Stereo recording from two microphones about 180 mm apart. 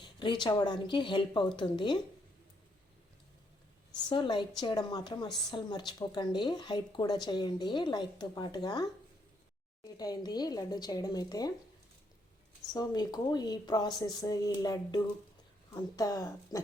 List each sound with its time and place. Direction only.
0.0 s a woman's voice: 25° left (ahead or behind)
4.1 s a woman's voice: 25° left (ahead or behind)
12.7 s a woman's voice: 20° left (ahead or behind)